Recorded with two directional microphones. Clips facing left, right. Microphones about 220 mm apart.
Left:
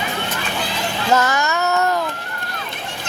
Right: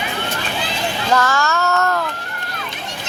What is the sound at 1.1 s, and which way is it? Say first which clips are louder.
Child singing: even; 20° left (ahead or behind).